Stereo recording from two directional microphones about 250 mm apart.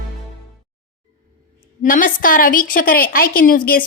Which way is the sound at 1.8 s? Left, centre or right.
Left.